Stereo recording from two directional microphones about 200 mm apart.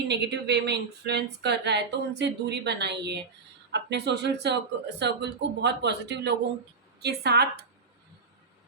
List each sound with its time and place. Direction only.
0.1 s a woman's voice: 55° right (ahead or behind)